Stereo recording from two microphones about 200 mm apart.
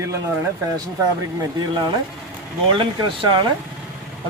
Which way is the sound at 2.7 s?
25° right (ahead or behind).